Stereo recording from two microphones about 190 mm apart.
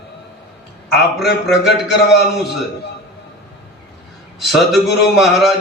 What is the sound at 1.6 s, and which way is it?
Speech, 60° left (ahead or behind).